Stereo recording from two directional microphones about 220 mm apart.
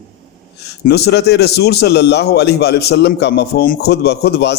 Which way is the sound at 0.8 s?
50° left (ahead or behind).